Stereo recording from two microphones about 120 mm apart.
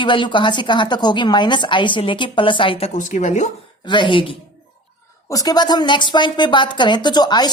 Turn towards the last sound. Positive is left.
turn(degrees=35)  # may be behind; listen again after turning